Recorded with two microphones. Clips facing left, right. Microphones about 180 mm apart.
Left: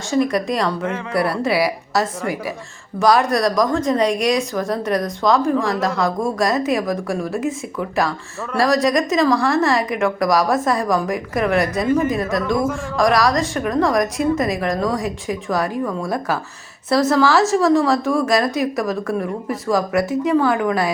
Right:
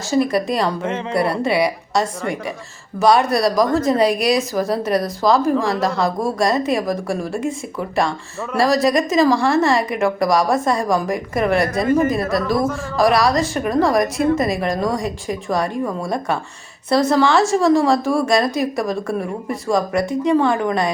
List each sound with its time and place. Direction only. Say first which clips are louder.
0.1 s a woman's voice: right 1 dB; centre (ahead or behind)
15.8 s a woman's voice: even; 15° right (ahead or behind)
16.0 s a woman's voice: even; centre (ahead or behind)